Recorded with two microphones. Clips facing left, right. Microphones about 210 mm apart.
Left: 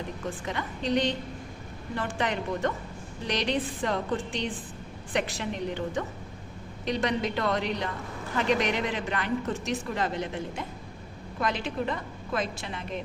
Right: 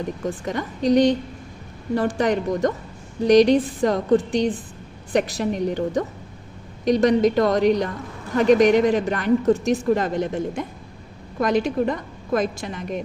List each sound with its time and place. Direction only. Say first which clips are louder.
0.4 s a woman's voice: right 10 dB; 45° right (ahead or behind)